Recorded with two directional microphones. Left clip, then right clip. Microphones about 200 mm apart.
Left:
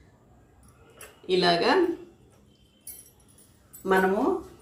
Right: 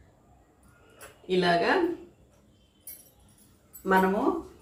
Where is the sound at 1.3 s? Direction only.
10° left (ahead or behind).